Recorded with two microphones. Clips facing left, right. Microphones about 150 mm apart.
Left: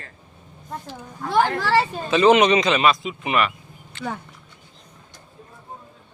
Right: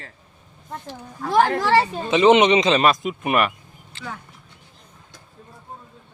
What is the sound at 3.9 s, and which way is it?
Speech, 30° right (ahead or behind).